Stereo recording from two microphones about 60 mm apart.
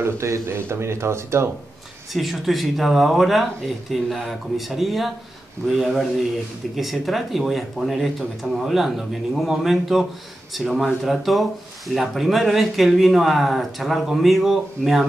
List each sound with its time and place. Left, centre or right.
0.5 s speech: right
2.1 s speech: centre